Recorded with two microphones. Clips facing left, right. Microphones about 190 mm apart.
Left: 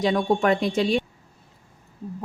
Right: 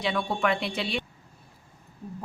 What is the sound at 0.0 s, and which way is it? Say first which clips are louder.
Speech: left 6 dB; 40° left (ahead or behind).